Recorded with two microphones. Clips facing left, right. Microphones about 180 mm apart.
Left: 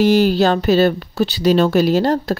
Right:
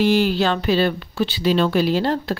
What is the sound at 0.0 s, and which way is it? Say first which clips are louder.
Speech: left 4 dB; 40° left (ahead or behind).